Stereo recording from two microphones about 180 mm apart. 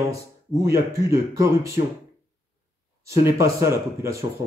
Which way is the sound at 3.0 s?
15° right (ahead or behind).